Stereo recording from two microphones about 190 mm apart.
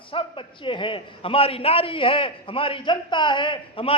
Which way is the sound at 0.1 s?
25° left (ahead or behind).